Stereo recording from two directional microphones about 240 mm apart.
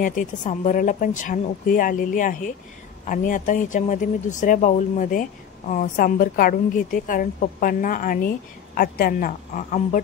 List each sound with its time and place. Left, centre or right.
0.0 s a woman's voice: left